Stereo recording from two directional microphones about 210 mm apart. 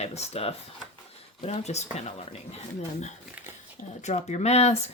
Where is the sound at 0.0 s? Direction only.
30° left (ahead or behind).